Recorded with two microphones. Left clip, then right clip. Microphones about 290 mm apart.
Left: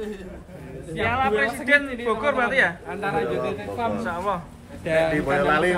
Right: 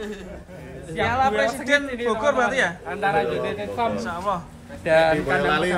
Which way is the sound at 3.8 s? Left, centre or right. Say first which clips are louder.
Right 1 dB; centre.